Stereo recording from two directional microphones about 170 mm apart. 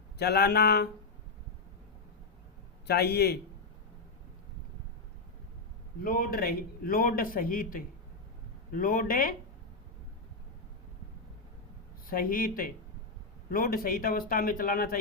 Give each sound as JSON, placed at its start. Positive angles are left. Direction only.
{"t": 0.2, "sound": "speech", "side_deg": 70}
{"t": 2.8, "sound": "speech", "side_deg": 70}
{"t": 6.0, "sound": "a man's voice", "side_deg": 55}
{"t": 12.0, "sound": "a man's voice", "side_deg": 55}